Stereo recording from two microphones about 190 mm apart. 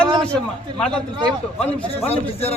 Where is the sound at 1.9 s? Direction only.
30° left (ahead or behind).